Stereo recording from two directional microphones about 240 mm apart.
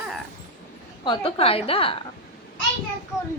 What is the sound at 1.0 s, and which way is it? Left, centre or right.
Speech, left.